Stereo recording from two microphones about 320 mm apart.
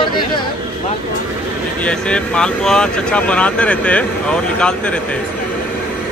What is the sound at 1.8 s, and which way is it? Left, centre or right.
Speech, centre.